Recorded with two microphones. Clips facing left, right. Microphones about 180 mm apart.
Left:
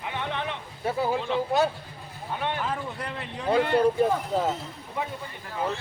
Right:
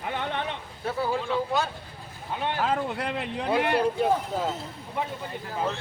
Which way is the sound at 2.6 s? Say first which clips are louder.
Right 5 dB; 85° right.